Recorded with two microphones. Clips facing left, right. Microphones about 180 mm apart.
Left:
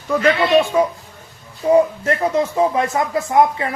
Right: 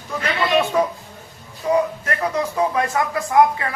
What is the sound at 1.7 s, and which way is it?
Speech, 25° left (ahead or behind).